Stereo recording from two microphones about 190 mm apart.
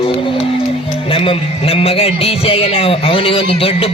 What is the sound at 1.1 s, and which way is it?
A man's voice, 30° left (ahead or behind).